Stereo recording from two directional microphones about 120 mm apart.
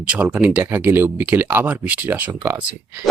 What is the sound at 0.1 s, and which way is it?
Speech, 10° right (ahead or behind).